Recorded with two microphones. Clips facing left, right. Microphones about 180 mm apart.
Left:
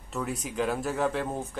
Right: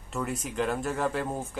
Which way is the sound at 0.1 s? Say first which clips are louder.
Even; centre (ahead or behind).